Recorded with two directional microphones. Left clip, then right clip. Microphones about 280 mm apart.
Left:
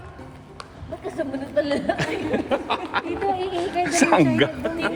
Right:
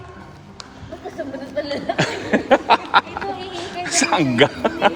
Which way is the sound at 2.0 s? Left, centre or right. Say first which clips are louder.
Right 4 dB; centre.